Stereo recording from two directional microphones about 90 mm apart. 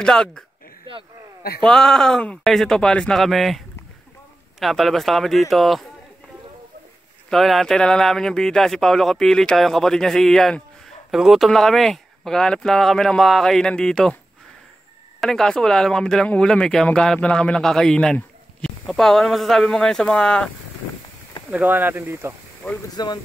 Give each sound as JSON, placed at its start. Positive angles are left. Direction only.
{"t": 0.0, "sound": "a man's voice", "side_deg": 5}
{"t": 1.6, "sound": "speech", "side_deg": 5}
{"t": 7.2, "sound": "speech", "side_deg": 0}
{"t": 15.1, "sound": "a man's voice", "side_deg": 5}
{"t": 21.5, "sound": "speech", "side_deg": -15}
{"t": 22.6, "sound": "a man's voice", "side_deg": 10}